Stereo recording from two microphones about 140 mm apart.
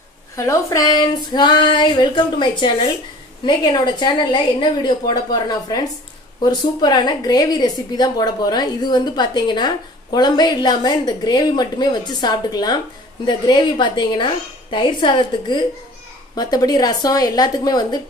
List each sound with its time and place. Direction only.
0.4 s a woman's voice: 20° left (ahead or behind)